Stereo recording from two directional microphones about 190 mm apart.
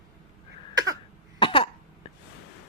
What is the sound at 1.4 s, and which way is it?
Cough, 30° left (ahead or behind).